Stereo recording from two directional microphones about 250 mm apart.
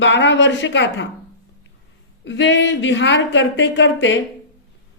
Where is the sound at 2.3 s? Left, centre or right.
Left.